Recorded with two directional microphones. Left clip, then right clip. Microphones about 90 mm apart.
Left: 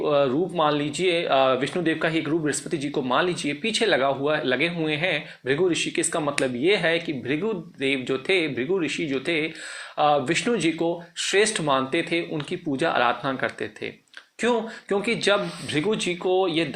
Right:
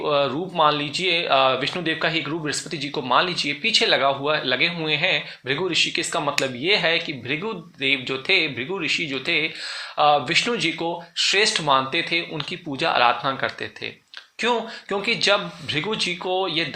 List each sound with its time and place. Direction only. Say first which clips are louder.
0.0 s speech: even; 25° left (ahead or behind)